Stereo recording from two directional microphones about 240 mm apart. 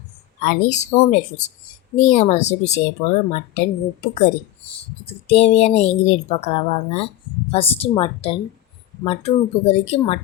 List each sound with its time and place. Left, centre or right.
0.4 s speech: left
5.0 s speech: left